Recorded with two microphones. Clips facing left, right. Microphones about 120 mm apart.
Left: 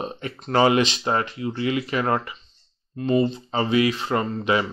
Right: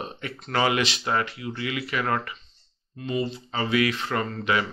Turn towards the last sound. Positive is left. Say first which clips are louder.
# left 3 dB
turn(degrees=25)  # may be behind; listen again after turning